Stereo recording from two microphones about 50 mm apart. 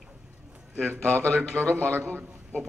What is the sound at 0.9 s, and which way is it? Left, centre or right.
Speech, right.